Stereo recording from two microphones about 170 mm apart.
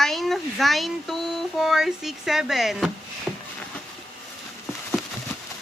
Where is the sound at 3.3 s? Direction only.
10° right (ahead or behind).